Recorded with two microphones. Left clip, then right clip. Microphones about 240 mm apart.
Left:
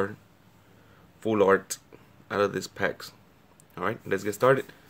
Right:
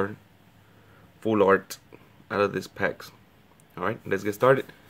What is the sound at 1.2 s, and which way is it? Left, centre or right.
Speech, centre.